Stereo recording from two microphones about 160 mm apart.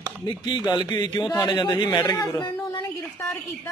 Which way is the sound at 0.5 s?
25° left (ahead or behind).